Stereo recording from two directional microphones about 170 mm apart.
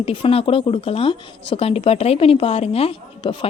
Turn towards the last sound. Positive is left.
turn(degrees=35)  # may be behind; listen again after turning